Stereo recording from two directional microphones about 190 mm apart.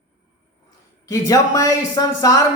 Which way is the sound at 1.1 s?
15° left (ahead or behind).